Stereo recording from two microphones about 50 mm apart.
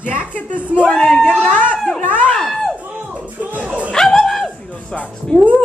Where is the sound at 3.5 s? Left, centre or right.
Right.